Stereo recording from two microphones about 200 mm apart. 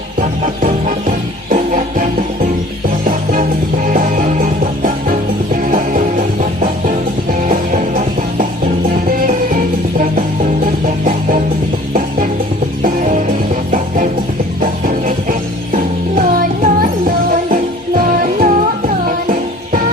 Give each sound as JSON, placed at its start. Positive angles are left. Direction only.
{"t": 0.2, "sound": "music", "side_deg": -40}
{"t": 3.9, "sound": "music", "side_deg": -45}
{"t": 10.8, "sound": "music", "side_deg": -40}
{"t": 12.8, "sound": "music", "side_deg": -40}
{"t": 14.6, "sound": "music", "side_deg": -45}
{"t": 18.2, "sound": "music", "side_deg": -45}